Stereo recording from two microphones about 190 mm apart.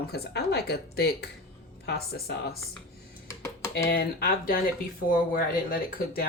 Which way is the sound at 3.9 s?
50° left (ahead or behind).